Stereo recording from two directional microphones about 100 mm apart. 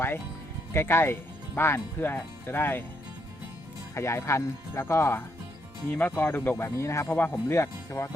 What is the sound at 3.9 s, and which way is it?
Speech, 25° left (ahead or behind).